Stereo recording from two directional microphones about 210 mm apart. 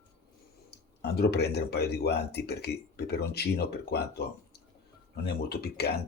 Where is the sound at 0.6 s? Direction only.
50° left (ahead or behind).